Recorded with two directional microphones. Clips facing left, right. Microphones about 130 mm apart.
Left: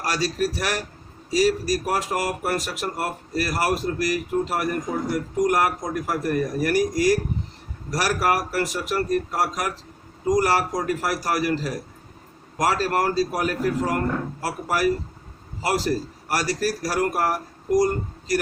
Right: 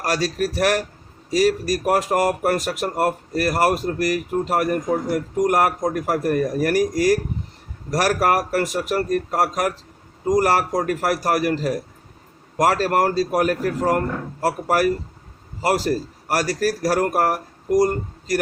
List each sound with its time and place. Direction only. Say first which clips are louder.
0.0 s speech: right 2 dB; 50° right (ahead or behind)